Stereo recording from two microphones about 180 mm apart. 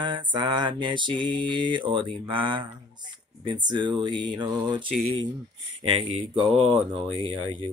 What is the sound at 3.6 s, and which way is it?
Mantra, 25° right (ahead or behind).